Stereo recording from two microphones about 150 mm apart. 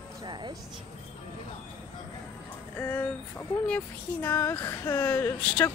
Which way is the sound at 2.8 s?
10° left (ahead or behind).